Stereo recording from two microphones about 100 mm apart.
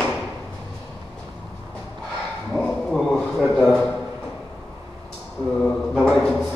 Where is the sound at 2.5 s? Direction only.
5° left (ahead or behind).